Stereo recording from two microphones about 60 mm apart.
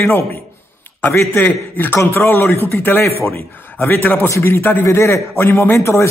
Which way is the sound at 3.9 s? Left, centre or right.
Left.